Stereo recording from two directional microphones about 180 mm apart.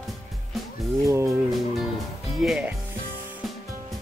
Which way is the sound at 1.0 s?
15° right (ahead or behind).